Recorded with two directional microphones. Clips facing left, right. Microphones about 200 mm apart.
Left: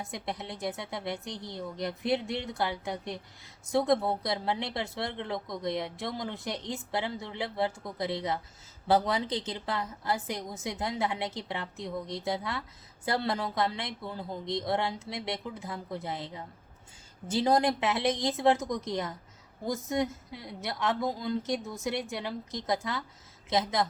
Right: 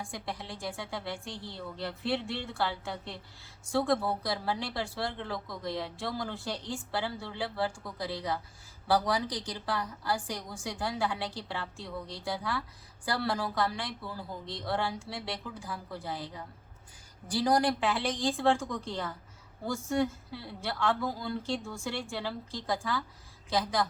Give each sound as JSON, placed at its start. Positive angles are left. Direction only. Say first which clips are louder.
{"t": 0.0, "sound": "speech", "louder": "left 2 dB", "side_deg": 20}